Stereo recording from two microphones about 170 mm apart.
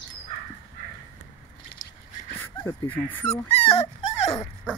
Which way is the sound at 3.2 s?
35° left (ahead or behind).